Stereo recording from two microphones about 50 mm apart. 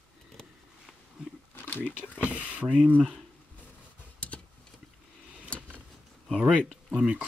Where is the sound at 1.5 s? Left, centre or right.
Left.